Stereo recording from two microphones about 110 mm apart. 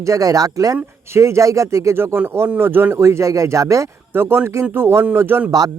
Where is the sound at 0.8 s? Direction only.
20° right (ahead or behind).